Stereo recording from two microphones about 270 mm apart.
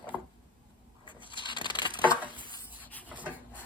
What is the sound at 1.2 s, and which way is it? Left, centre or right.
Crushing, centre.